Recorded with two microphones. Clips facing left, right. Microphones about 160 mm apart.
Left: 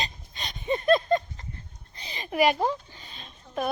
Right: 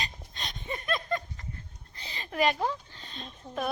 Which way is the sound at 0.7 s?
30° left (ahead or behind).